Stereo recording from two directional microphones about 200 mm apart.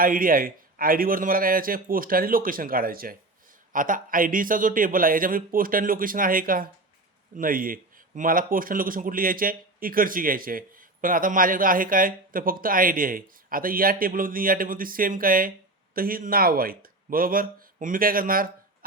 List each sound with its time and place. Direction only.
0.0 s speech: 45° right (ahead or behind)